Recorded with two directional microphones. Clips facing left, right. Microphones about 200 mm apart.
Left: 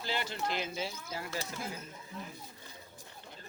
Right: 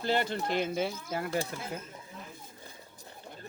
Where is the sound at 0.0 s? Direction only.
55° right (ahead or behind).